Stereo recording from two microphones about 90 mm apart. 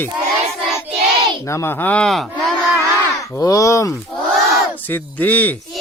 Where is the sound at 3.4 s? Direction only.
40° left (ahead or behind).